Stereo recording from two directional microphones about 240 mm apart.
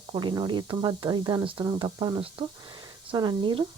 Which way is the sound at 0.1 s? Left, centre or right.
Centre.